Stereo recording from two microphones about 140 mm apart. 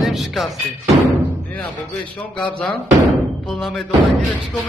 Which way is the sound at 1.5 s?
10° left (ahead or behind).